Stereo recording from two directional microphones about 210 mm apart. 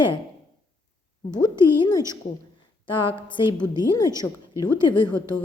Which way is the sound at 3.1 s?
25° left (ahead or behind).